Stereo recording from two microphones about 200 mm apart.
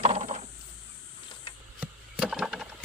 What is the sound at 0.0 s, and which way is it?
Mechanisms, 35° right (ahead or behind).